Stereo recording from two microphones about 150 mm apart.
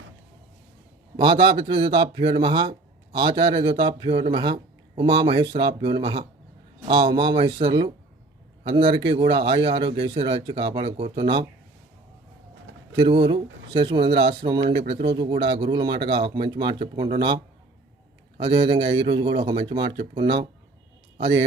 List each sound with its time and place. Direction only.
1.1 s speech: 30° right (ahead or behind)
13.0 s speech: 35° right (ahead or behind)